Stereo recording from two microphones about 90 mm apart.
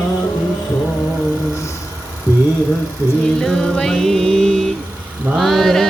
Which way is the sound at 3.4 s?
5° left (ahead or behind).